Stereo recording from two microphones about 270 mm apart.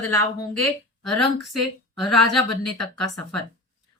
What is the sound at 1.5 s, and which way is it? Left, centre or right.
A woman's voice, centre.